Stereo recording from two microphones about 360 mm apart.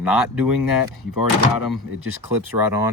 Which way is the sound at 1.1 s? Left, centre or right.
Left.